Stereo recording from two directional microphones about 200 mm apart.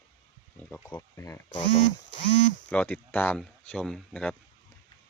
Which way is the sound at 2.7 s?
10° left (ahead or behind).